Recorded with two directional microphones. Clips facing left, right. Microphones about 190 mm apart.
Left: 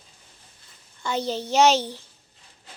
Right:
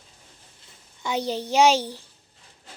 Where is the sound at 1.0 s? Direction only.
15° right (ahead or behind).